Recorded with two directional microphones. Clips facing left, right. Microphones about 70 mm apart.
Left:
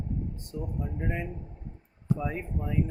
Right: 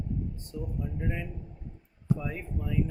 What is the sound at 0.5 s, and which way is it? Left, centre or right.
Speech, left.